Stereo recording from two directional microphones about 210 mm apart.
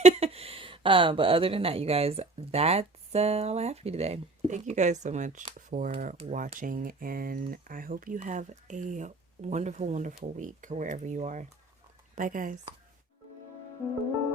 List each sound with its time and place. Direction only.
0.0 s speech: 30° right (ahead or behind)